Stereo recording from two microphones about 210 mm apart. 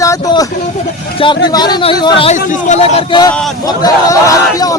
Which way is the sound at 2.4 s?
35° left (ahead or behind).